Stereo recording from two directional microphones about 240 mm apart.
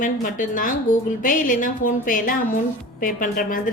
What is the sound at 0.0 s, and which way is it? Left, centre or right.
A woman's voice, left.